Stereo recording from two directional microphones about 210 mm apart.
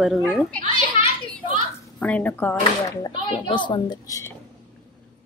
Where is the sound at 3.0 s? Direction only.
25° left (ahead or behind).